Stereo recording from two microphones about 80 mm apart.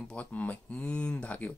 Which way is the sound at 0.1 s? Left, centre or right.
Centre.